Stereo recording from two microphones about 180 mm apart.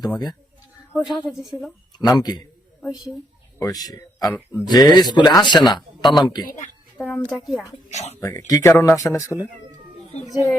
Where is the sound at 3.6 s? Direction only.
20° left (ahead or behind).